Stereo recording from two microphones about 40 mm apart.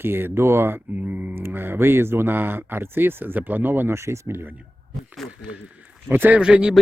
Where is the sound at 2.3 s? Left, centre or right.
Right.